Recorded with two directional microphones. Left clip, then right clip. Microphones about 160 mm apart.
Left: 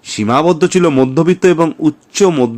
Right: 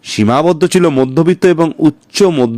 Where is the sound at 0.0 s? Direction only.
35° right (ahead or behind).